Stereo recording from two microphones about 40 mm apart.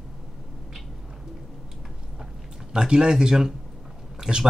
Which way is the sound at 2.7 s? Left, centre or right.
Centre.